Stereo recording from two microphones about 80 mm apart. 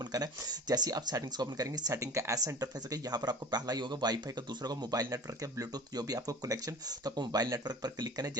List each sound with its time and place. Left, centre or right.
0.1 s speech: right
7.2 s speech: right